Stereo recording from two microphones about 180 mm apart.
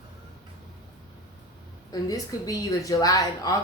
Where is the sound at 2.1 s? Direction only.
20° left (ahead or behind).